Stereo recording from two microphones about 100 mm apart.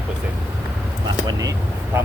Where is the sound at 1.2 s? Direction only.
40° right (ahead or behind).